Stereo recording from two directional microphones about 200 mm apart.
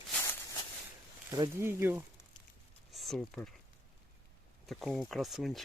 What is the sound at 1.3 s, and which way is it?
Speech, 15° right (ahead or behind).